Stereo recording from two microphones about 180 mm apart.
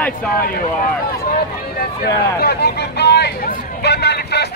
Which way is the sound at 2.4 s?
65° left (ahead or behind).